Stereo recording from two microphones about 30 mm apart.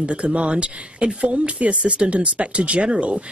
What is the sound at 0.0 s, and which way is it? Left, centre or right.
A man's voice, right.